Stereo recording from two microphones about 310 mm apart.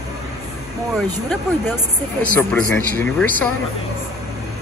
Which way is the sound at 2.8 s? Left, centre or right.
Right.